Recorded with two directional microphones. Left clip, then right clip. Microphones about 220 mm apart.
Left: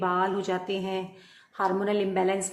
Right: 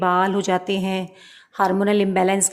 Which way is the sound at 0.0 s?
45° right (ahead or behind).